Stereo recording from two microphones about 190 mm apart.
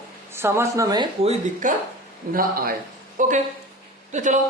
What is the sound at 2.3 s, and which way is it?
A man's voice, 50° right (ahead or behind).